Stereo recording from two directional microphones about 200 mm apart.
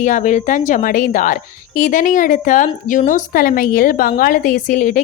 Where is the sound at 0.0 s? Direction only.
40° left (ahead or behind).